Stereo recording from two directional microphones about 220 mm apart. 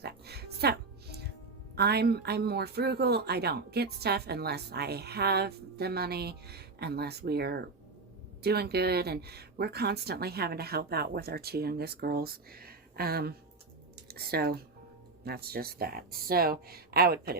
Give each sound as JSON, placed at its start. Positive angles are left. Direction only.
{"t": 0.0, "sound": "music", "side_deg": -45}
{"t": 1.7, "sound": "speech", "side_deg": -45}